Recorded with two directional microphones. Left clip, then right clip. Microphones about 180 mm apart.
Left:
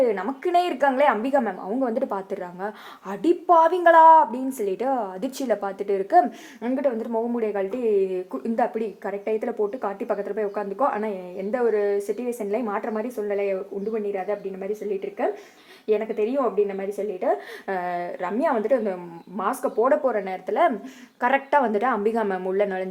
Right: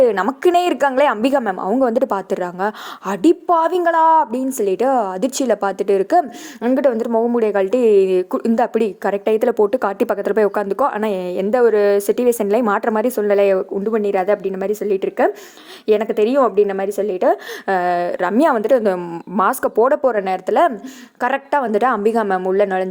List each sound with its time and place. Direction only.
0.0 s a woman's voice: 50° right (ahead or behind); by 14.7 s 65° right (ahead or behind)
15.9 s a woman's voice: 55° right (ahead or behind); by 22.9 s 35° right (ahead or behind)